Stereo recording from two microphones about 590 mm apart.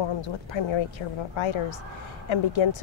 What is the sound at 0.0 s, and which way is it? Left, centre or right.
Speech, left.